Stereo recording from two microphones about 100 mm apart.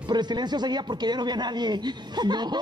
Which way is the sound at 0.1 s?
45° right (ahead or behind).